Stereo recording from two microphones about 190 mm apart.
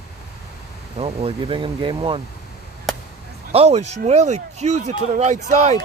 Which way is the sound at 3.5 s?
35° right (ahead or behind).